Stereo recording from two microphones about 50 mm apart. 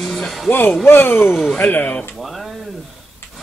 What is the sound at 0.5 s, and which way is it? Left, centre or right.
Speech, left.